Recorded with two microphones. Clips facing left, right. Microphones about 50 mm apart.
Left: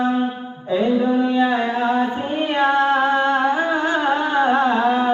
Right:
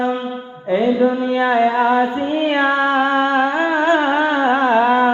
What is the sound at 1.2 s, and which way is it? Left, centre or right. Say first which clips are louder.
Music: right 3 dB; right.